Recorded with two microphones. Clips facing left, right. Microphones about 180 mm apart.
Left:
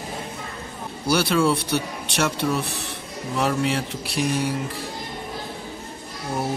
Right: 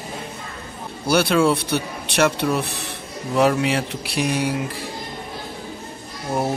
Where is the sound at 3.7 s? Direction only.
70° right (ahead or behind).